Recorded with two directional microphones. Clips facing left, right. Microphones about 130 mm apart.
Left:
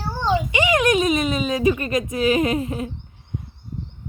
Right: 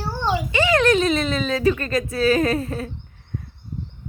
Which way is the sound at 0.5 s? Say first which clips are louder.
Right 3 dB; 15° left (ahead or behind).